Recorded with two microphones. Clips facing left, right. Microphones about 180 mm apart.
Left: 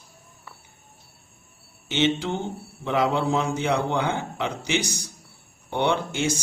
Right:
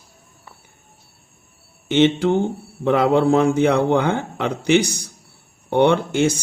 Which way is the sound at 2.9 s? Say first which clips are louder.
Right 7 dB; 55° right (ahead or behind).